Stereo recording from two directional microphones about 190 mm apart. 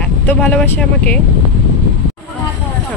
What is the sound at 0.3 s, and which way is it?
Speech, 10° left (ahead or behind).